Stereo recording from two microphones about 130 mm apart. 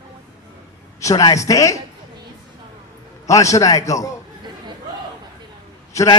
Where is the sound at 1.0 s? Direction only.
25° left (ahead or behind).